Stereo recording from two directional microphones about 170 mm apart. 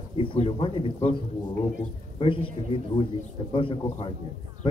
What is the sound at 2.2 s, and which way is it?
A man's voice, 30° left (ahead or behind).